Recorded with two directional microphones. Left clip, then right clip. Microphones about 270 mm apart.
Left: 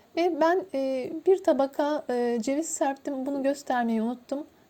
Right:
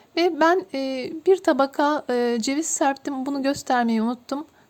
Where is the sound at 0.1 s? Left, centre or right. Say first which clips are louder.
Right 4 dB; centre.